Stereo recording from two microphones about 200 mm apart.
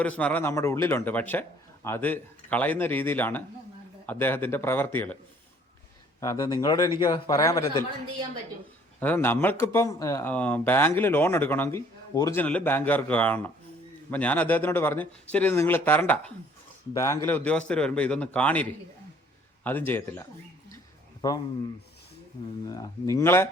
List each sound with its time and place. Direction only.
0.0 s speech: 5° left (ahead or behind)
6.1 s speech: 15° left (ahead or behind)
9.0 s speech: 10° left (ahead or behind)
22.6 s speech: 20° left (ahead or behind)